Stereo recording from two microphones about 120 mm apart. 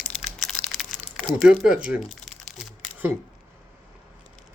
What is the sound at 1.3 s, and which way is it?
Speech, 5° right (ahead or behind).